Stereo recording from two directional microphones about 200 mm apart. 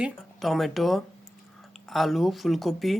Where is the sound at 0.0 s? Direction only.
Centre (ahead or behind).